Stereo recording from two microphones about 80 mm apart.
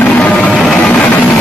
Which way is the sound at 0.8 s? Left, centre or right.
Left.